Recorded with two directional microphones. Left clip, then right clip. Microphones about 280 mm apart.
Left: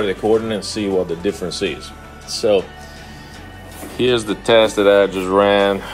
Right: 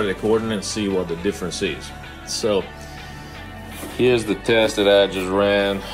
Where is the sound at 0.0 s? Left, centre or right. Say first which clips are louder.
Left 3 dB; centre.